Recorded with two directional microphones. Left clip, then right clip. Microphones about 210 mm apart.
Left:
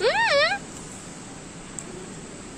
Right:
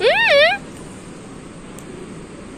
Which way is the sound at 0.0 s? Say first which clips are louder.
Right 7 dB; 15° left (ahead or behind).